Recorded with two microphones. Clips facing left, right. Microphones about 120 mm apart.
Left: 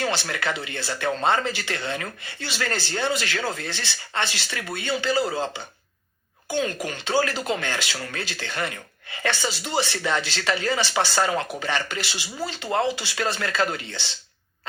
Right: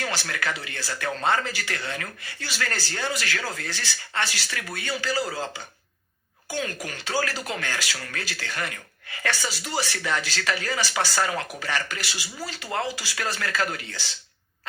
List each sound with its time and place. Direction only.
0.0 s speech: 25° left (ahead or behind)